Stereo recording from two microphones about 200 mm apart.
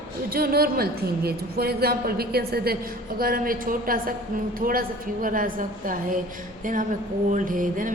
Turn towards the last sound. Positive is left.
turn(degrees=-40)  # may be behind; listen again after turning